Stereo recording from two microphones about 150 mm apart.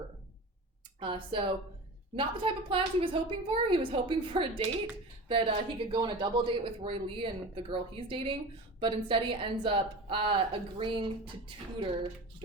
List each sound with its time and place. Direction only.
0.9 s speech: 35° right (ahead or behind)